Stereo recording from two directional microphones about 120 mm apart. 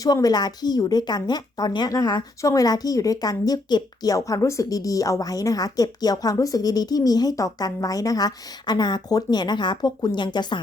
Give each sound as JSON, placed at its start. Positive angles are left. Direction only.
{"t": 0.0, "sound": "a woman's voice", "side_deg": 30}